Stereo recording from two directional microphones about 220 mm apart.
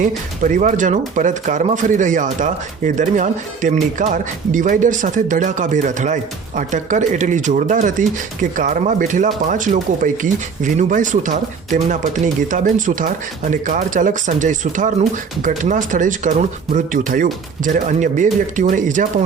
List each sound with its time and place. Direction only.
0.0 s speech: 35° right (ahead or behind)